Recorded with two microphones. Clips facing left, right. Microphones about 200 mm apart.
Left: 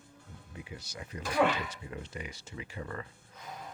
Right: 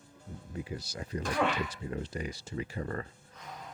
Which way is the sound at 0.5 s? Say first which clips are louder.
Right 6 dB; 40° right (ahead or behind).